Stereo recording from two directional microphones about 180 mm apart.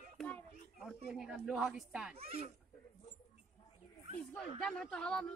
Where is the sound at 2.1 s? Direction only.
35° right (ahead or behind).